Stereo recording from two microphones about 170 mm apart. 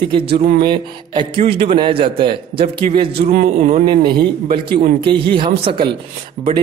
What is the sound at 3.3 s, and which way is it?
Speech, 50° right (ahead or behind).